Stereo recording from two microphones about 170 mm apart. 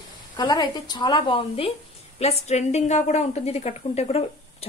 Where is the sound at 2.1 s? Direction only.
40° left (ahead or behind).